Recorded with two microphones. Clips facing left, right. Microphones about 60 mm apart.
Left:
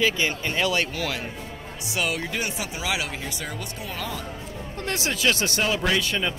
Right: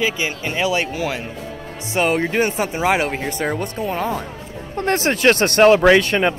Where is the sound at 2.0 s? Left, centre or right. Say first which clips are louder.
Right 10 dB; right.